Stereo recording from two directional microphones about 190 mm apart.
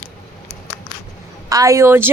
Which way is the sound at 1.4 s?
20° right (ahead or behind).